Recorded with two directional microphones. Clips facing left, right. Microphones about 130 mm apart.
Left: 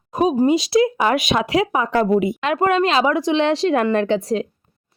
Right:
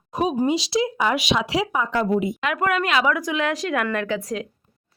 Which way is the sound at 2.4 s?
30° left (ahead or behind).